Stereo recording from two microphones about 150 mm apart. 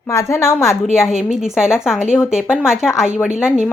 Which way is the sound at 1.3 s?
5° right (ahead or behind).